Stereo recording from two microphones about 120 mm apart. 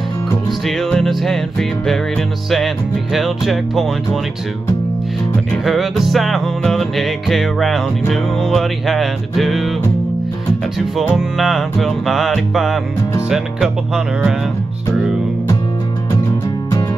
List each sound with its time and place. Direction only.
0.5 s music: centre (ahead or behind)
5.7 s music: centre (ahead or behind)
11.1 s music: centre (ahead or behind)